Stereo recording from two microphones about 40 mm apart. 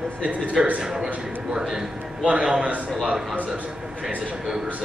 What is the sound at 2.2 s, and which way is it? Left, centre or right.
Speech, right.